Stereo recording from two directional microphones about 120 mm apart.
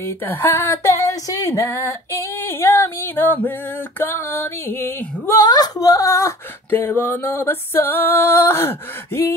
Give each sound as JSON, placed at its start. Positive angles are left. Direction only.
{"t": 0.0, "sound": "female singing", "side_deg": 20}
{"t": 3.4, "sound": "music", "side_deg": 15}
{"t": 5.4, "sound": "female singing", "side_deg": 35}